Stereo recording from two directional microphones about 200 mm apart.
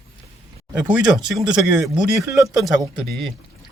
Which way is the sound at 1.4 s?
20° right (ahead or behind).